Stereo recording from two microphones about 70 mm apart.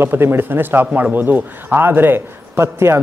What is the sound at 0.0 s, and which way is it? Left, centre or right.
Speech, right.